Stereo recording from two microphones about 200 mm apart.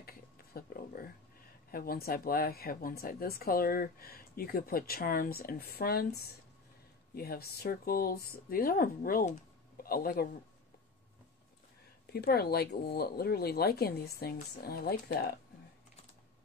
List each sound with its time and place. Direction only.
0.0 s a sound: 50° left (ahead or behind)
1.7 s speech: 50° left (ahead or behind)
12.1 s speech: 50° left (ahead or behind)